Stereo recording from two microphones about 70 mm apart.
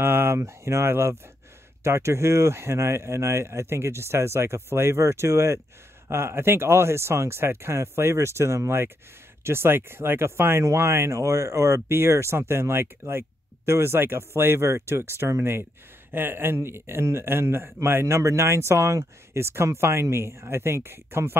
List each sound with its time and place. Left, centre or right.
0.0 s speech: right